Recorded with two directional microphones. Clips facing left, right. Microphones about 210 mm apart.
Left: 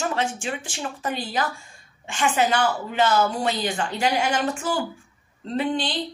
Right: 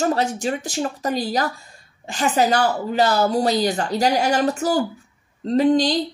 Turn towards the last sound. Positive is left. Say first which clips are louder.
# right 8 dB
turn(degrees=-40)  # may be behind; listen again after turning